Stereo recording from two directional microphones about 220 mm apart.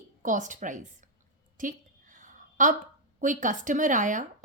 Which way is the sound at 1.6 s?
35° right (ahead or behind).